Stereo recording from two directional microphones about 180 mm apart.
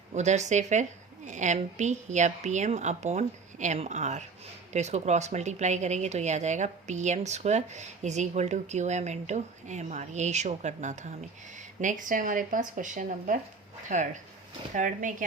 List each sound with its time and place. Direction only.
0.1 s speech: 40° right (ahead or behind)